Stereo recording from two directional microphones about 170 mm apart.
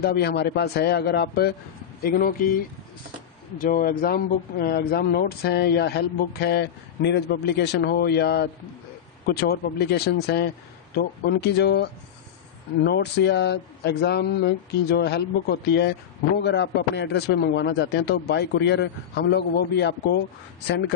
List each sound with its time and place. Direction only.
0.0 s speech: 70° left (ahead or behind)
2.0 s speech: 55° left (ahead or behind)
3.6 s speech: 55° left (ahead or behind); by 20.9 s 90° left